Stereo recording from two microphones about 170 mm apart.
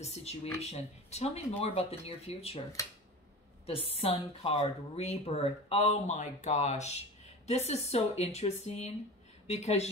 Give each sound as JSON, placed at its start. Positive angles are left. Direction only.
{"t": 0.0, "sound": "speech", "side_deg": 40}
{"t": 3.6, "sound": "speech", "side_deg": 35}